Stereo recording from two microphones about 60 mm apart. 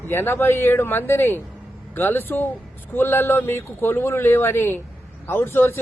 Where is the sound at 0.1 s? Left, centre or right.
Left.